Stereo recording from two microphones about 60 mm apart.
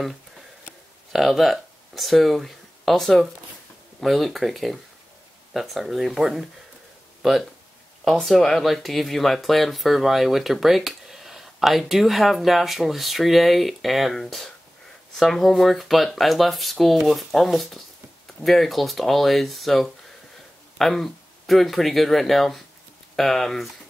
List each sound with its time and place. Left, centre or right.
1.1 s speech: centre